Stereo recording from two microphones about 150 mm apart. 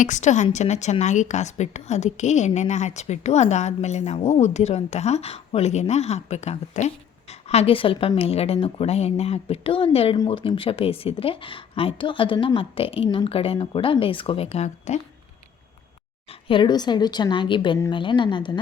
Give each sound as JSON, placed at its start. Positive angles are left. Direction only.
{"t": 0.0, "sound": "a woman's voice", "side_deg": 55}
{"t": 16.3, "sound": "a woman's voice", "side_deg": 35}